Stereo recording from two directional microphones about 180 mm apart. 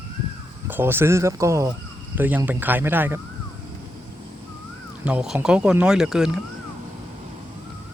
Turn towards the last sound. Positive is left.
turn(degrees=-5)  # may be behind; listen again after turning